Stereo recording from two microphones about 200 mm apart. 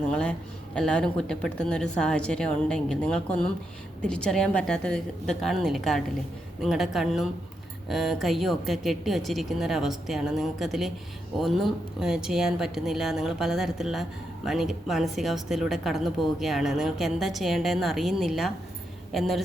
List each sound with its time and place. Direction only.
0.1 s speech: 5° left (ahead or behind)